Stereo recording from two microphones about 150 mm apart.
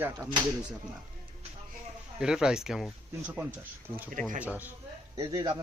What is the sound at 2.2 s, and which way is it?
Speech, 5° right (ahead or behind).